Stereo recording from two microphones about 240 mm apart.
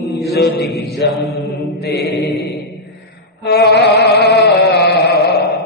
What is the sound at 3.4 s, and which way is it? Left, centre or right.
Chant, left.